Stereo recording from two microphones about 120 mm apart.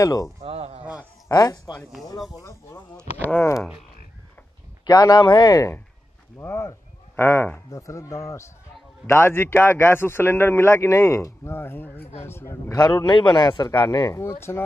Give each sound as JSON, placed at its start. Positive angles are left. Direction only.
{"t": 0.0, "sound": "speech", "side_deg": 30}
{"t": 0.4, "sound": "speech", "side_deg": -65}
{"t": 1.3, "sound": "speech", "side_deg": 35}
{"t": 4.8, "sound": "speech", "side_deg": 35}
{"t": 12.9, "sound": "speech", "side_deg": 40}
{"t": 14.2, "sound": "speech", "side_deg": 20}